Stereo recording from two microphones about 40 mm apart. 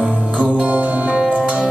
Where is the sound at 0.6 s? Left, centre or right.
Right.